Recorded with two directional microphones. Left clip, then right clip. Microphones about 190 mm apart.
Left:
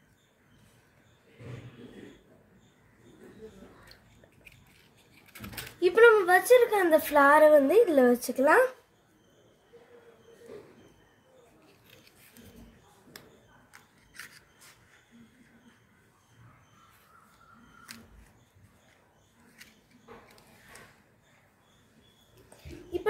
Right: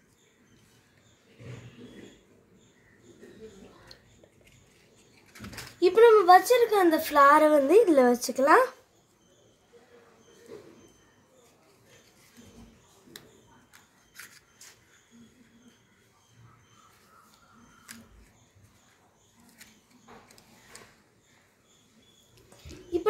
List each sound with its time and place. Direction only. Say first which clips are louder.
5.9 s a woman's voice: right 3 dB; 45° right (ahead or behind)